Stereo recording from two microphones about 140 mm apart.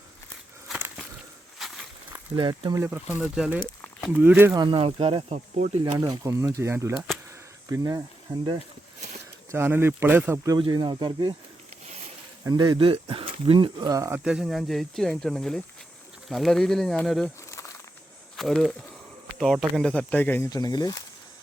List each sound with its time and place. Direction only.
2.3 s speech: 35° right (ahead or behind)
2.7 s speech: 15° right (ahead or behind)
4.5 s speech: 35° right (ahead or behind)
5.6 s speech: 50° right (ahead or behind)
6.2 s speech: 25° right (ahead or behind)
9.5 s speech: 15° right (ahead or behind)
10.6 s speech: 35° right (ahead or behind)
12.5 s speech: 30° right (ahead or behind)
13.7 s speech: 25° right (ahead or behind)
14.3 s speech: 5° right (ahead or behind)
18.3 s speech: 5° left (ahead or behind)
20.5 s speech: 30° left (ahead or behind)